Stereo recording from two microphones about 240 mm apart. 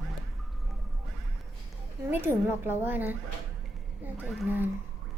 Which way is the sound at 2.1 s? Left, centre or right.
Centre.